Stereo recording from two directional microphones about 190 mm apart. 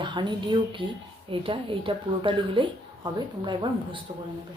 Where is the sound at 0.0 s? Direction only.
25° right (ahead or behind).